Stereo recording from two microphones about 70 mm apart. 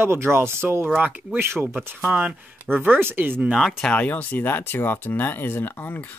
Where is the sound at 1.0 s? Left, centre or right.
Right.